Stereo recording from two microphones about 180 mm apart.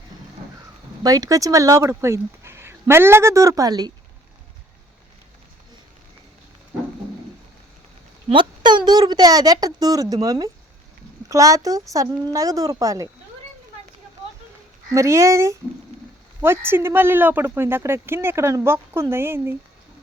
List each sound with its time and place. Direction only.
1.0 s speech: 20° right (ahead or behind)
8.3 s a woman's voice: 25° right (ahead or behind)
14.9 s speech: 15° right (ahead or behind)